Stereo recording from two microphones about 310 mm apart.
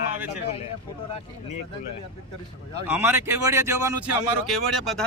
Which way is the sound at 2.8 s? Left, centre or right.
Centre.